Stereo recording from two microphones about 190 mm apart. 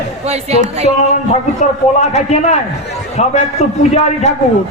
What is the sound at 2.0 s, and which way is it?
Speech, 35° left (ahead or behind).